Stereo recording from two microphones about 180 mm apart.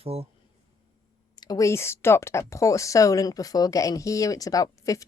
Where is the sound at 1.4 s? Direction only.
20° left (ahead or behind).